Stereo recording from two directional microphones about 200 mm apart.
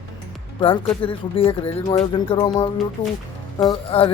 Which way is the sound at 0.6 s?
25° left (ahead or behind).